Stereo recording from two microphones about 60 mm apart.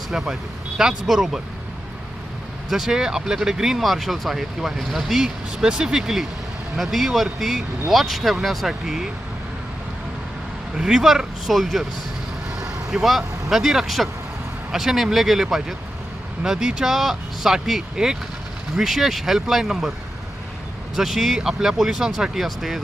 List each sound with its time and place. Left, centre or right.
0.1 s speech: centre
2.6 s speech: centre
5.5 s speech: centre
10.8 s speech: centre
20.9 s speech: centre